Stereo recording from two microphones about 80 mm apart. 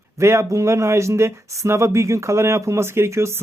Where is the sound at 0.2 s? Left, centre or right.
Right.